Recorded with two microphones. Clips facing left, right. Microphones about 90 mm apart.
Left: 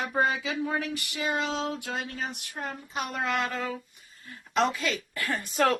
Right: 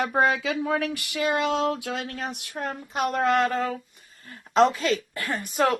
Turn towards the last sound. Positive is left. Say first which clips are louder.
# right 2 dB
turn(degrees=-20)  # may be behind; listen again after turning